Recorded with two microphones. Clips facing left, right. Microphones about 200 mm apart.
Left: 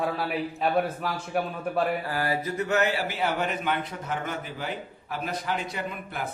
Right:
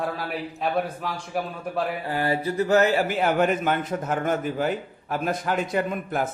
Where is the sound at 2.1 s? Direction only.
25° right (ahead or behind); by 6.3 s 45° right (ahead or behind).